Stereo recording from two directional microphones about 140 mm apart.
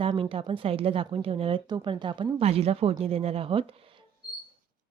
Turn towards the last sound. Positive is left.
turn(degrees=-40)  # may be behind; listen again after turning